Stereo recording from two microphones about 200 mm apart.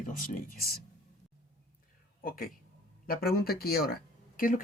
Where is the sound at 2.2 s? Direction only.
45° left (ahead or behind).